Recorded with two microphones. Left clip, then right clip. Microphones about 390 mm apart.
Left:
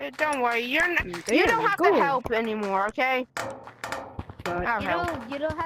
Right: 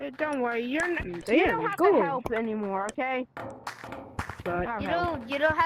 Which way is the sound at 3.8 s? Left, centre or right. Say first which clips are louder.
Left 7 dB; left.